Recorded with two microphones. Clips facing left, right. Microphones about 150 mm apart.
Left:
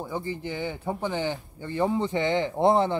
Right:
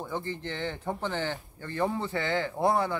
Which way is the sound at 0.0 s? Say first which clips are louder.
Left 3 dB; 10° left (ahead or behind).